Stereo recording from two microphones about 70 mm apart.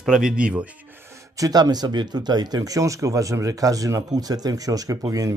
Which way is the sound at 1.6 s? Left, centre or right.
Right.